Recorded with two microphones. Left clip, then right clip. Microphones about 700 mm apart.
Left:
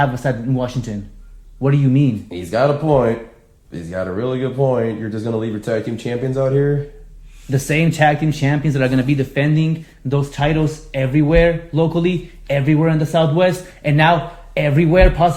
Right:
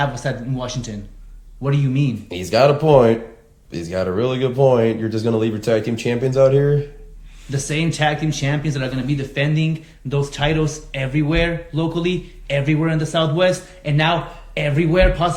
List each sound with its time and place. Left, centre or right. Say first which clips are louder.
0.0 s speech: left 4 dB; left
2.3 s speech: right 3 dB; centre
7.5 s speech: left 4 dB; left